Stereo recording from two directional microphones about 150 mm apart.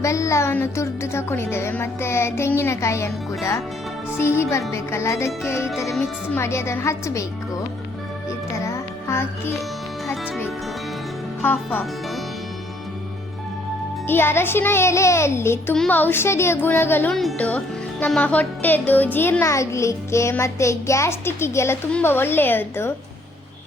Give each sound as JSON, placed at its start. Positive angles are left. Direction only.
{"t": 0.0, "sound": "speech", "side_deg": 20}
{"t": 4.7, "sound": "music", "side_deg": 20}
{"t": 5.6, "sound": "music", "side_deg": -5}
{"t": 6.0, "sound": "speech", "side_deg": 15}
{"t": 8.5, "sound": "music", "side_deg": 20}
{"t": 14.1, "sound": "speech", "side_deg": 15}